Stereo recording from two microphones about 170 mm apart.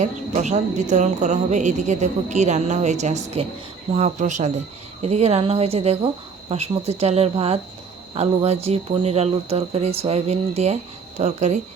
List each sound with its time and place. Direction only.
0.0 s speech: 45° right (ahead or behind)